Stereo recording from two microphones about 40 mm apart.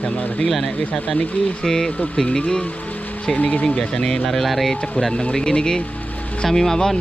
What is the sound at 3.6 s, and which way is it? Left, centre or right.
Speech, left.